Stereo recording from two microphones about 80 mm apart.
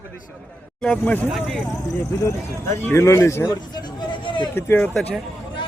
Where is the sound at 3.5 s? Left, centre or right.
Left.